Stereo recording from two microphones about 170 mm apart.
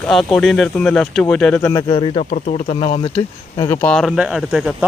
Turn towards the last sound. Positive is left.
turn(degrees=-5)  # may be behind; listen again after turning